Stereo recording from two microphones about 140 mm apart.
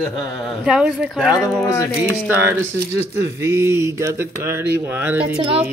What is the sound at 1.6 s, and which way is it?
Speech, 25° left (ahead or behind).